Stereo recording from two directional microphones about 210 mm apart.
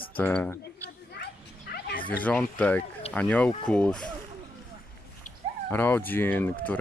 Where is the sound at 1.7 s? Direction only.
45° left (ahead or behind).